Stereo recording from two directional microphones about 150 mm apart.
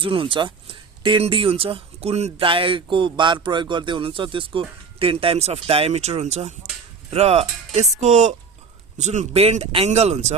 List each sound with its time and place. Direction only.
0.0 s speech: 35° right (ahead or behind)